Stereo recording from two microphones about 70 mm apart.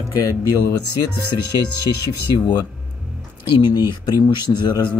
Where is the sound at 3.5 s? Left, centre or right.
Left.